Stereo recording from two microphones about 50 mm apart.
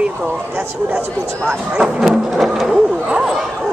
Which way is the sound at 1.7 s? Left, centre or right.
Centre.